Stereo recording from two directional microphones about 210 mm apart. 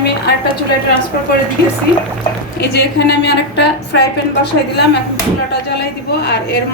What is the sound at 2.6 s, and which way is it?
A woman's voice, 50° left (ahead or behind).